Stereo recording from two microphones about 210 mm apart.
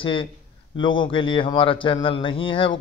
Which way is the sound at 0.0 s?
25° left (ahead or behind).